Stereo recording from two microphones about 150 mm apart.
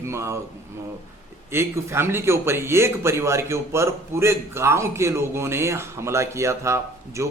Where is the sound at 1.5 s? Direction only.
15° right (ahead or behind).